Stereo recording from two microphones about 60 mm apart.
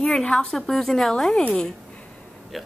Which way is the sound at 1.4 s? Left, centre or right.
Centre.